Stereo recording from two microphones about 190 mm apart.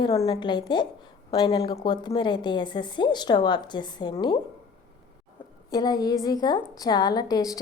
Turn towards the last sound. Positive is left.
turn(degrees=20)  # may be behind; listen again after turning